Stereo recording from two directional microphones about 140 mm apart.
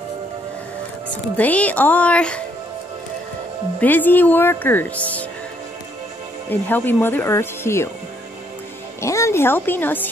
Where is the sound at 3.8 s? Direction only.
15° left (ahead or behind).